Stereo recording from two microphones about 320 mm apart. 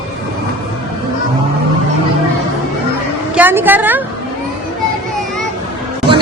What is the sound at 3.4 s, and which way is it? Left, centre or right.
Speech, centre.